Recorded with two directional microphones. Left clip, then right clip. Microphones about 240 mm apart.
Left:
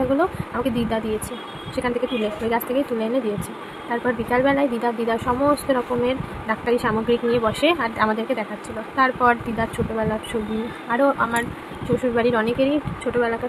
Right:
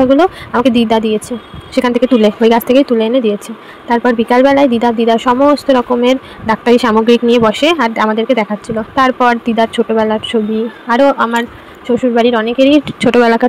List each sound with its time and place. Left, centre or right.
0.1 s speech: right